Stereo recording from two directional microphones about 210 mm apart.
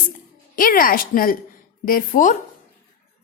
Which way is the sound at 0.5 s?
45° left (ahead or behind).